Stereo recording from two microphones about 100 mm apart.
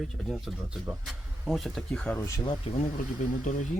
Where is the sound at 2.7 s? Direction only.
90° left.